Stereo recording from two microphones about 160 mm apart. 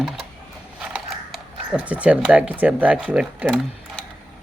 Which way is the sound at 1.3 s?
10° right (ahead or behind).